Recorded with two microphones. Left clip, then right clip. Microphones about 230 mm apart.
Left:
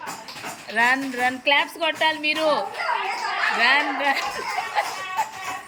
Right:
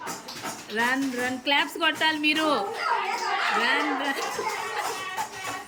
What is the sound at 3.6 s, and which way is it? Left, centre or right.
Speech, centre.